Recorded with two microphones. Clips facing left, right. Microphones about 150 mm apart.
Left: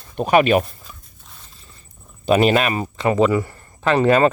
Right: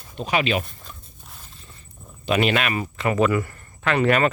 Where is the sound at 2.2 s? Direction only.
40° left (ahead or behind); by 3.5 s 25° left (ahead or behind).